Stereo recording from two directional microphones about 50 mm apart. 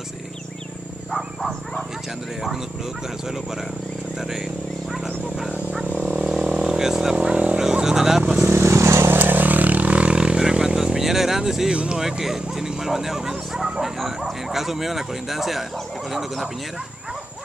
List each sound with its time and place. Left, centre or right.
1.1 s wild animals: centre
4.2 s speech: centre
4.9 s wild animals: centre
5.9 s vehicle: right; by 7.2 s centre
7.2 s vehicle: right
8.5 s vehicle: right
9.1 s vehicle: right; by 11.7 s centre
11.7 s speech: right
12.0 s bow-wow: centre
16.1 s speech: centre